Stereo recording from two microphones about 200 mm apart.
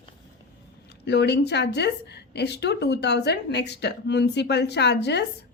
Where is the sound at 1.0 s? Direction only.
55° left (ahead or behind).